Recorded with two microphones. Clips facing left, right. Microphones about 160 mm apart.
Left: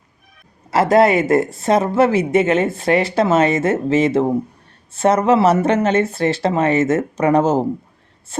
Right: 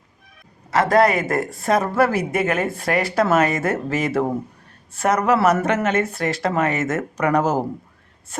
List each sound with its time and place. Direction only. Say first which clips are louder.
0.7 s speech: left 3 dB; 25° left (ahead or behind)